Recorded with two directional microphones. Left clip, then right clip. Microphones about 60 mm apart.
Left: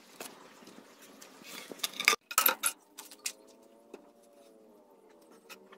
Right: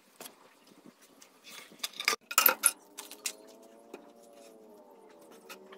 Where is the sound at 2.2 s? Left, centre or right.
Centre.